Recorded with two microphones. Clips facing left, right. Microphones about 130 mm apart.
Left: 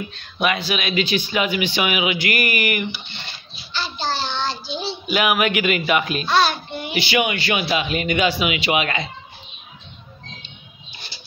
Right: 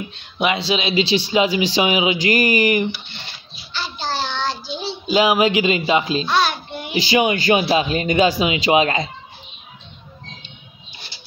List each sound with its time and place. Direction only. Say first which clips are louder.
0.1 s speech: right 2 dB; 25° right (ahead or behind)
3.7 s child singing: even; 10° right (ahead or behind)
5.0 s speech: right 4 dB; 25° right (ahead or behind)
6.2 s child singing: left 1 dB; 5° right (ahead or behind)
7.1 s speech: right 6 dB; 35° right (ahead or behind)